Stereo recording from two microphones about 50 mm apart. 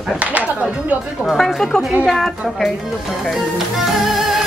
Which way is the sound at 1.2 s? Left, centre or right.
Centre.